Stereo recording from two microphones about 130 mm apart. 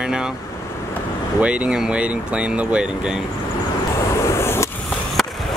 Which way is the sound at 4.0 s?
20° left (ahead or behind).